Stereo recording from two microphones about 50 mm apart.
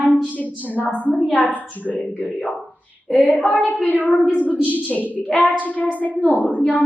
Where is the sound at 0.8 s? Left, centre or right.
Left.